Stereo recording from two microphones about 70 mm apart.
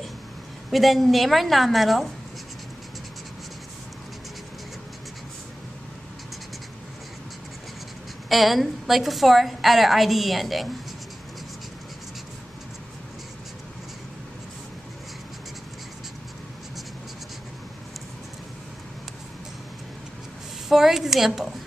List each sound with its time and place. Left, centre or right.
0.7 s a woman's voice: centre
8.3 s a woman's voice: centre
20.6 s a woman's voice: centre